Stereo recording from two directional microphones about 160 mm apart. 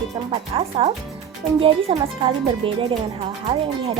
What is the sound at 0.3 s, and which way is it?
A woman's voice, 35° right (ahead or behind).